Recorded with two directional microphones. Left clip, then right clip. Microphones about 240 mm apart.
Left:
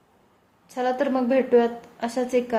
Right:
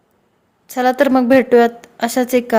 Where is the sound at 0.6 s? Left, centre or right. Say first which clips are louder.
Right 10 dB; right.